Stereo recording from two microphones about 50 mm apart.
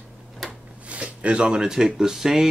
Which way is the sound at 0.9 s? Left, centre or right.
Right.